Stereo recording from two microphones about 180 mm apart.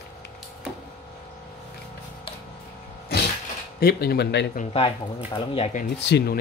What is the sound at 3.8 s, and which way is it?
Speech, 60° left (ahead or behind).